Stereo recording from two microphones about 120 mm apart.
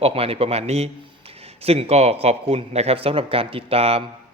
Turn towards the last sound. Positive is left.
turn(degrees=-55)  # may be behind; listen again after turning